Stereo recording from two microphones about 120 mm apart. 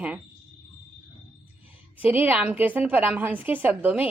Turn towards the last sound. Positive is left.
turn(degrees=-15)  # may be behind; listen again after turning